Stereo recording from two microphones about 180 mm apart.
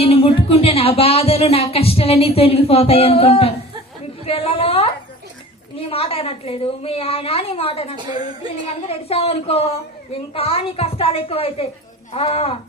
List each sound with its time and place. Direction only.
0.0 s a woman's voice: 30° left (ahead or behind)